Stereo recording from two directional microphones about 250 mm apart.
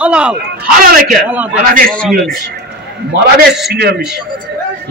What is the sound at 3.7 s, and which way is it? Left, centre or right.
Speech, right.